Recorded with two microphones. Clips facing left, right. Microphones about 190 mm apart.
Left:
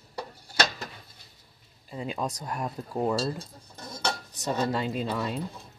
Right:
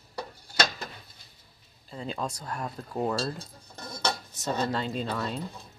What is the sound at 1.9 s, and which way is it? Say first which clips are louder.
Speech: left 2 dB; 15° left (ahead or behind).